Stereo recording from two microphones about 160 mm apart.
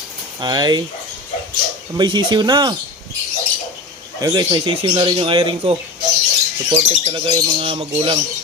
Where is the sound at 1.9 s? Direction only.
30° right (ahead or behind).